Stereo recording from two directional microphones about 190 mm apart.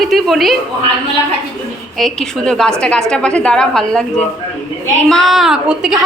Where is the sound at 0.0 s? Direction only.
Centre (ahead or behind).